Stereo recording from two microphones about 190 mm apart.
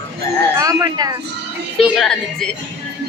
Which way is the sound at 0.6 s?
20° right (ahead or behind).